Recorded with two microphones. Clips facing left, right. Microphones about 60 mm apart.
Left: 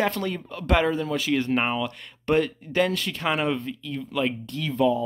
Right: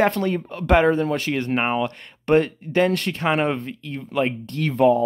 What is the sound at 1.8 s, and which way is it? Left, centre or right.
Speech, right.